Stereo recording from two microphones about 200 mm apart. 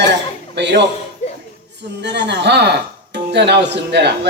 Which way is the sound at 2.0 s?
60° right (ahead or behind).